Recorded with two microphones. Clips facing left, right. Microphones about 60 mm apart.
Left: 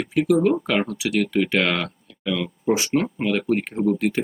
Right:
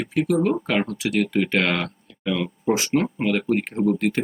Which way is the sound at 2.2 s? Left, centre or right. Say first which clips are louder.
Even; centre.